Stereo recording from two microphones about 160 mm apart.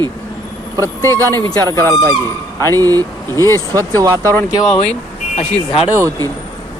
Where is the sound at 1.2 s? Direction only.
25° right (ahead or behind).